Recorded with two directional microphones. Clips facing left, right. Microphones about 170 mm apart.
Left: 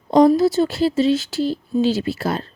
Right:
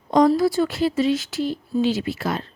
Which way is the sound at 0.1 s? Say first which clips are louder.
Left 3 dB; 25° left (ahead or behind).